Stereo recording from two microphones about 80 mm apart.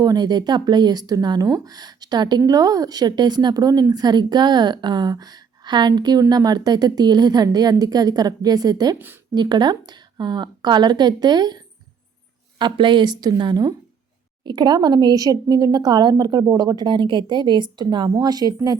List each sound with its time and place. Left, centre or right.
0.0 s a woman's voice: right
2.5 s a woman's voice: right
9.3 s a woman's voice: right
12.5 s a woman's voice: right